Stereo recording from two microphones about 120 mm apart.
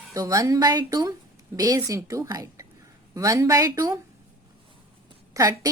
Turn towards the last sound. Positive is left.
turn(degrees=-25)  # may be behind; listen again after turning